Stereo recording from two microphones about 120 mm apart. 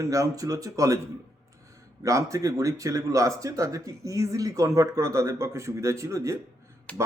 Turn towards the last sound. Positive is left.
turn(degrees=10)  # may be behind; listen again after turning